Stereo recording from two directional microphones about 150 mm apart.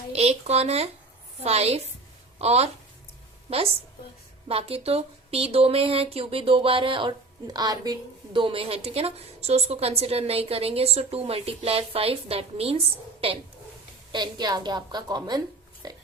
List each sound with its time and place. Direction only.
0.1 s speech: 45° right (ahead or behind)
14.1 s a woman's voice: 30° right (ahead or behind)
15.8 s a sound: 25° right (ahead or behind)